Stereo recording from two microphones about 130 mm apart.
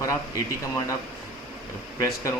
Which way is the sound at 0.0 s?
25° left (ahead or behind).